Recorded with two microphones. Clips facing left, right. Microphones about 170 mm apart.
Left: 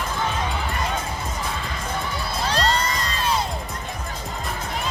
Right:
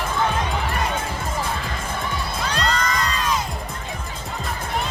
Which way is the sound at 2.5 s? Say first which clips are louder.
Left 1 dB; 35° left (ahead or behind).